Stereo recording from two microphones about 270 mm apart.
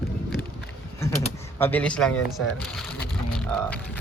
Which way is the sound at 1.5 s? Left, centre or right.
Centre.